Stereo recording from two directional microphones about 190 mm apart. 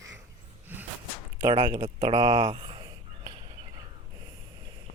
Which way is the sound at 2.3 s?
30° right (ahead or behind).